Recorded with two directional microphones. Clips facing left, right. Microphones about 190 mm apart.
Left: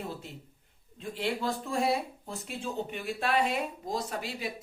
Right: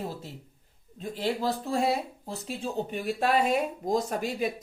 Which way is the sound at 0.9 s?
40° right (ahead or behind).